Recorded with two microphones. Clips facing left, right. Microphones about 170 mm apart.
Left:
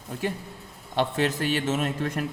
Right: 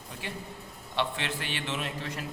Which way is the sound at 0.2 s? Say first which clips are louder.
Left 9 dB; 45° left (ahead or behind).